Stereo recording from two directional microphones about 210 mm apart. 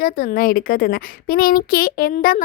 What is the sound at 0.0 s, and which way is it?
A child's voice, 45° left (ahead or behind).